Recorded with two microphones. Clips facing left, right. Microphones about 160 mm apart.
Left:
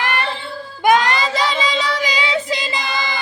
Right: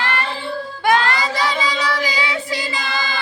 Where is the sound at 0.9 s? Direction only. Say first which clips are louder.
Left 2 dB; 20° left (ahead or behind).